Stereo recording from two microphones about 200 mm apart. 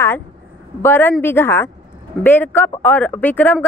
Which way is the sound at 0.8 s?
10° left (ahead or behind).